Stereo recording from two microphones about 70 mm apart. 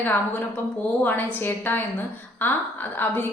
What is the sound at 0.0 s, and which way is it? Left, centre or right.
A woman's voice, left.